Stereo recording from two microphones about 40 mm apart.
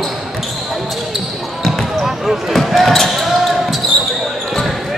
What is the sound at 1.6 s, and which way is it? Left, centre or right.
Basketball bounce, centre.